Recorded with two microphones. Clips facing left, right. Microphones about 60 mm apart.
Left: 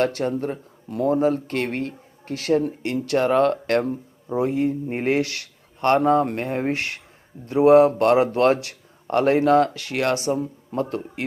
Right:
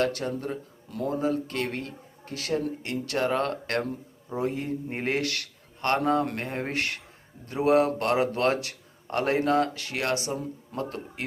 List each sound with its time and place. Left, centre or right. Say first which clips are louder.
0.0 s a man's voice: left 5 dB; left
6.0 s speech: left 6 dB; centre
6.7 s a man's voice: left 1 dB; left